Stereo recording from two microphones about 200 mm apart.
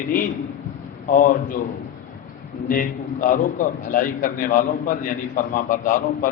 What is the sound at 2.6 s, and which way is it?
A man's voice, 45° left (ahead or behind).